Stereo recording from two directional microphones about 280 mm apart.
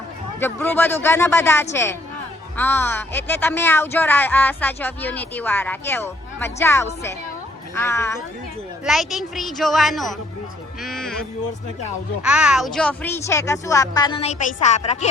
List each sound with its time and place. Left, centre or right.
0.3 s a woman's voice: centre; by 15.1 s left